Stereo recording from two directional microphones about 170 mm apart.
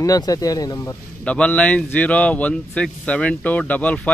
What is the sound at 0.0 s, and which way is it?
Speech, 20° left (ahead or behind).